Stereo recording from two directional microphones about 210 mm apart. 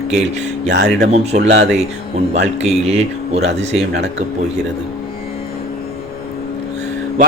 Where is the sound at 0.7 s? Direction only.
55° right (ahead or behind).